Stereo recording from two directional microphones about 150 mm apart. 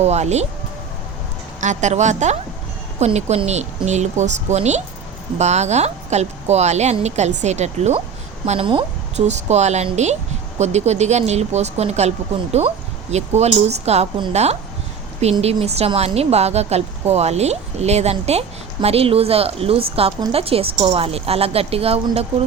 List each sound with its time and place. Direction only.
0.0 s speech: 45° right (ahead or behind)
1.6 s speech: 50° right (ahead or behind)
8.4 s speech: 35° right (ahead or behind)
9.1 s speech: 50° right (ahead or behind)
15.2 s speech: 45° right (ahead or behind)